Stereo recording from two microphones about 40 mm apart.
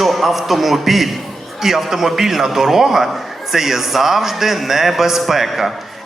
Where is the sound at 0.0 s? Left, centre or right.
Centre.